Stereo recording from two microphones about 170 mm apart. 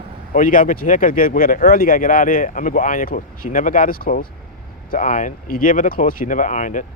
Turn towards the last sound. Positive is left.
turn(degrees=45)  # may be behind; listen again after turning